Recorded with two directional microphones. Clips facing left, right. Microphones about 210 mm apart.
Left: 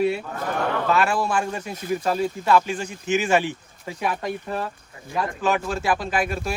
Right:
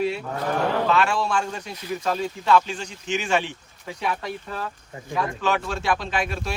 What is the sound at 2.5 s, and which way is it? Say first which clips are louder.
Speech: even; 10° left (ahead or behind).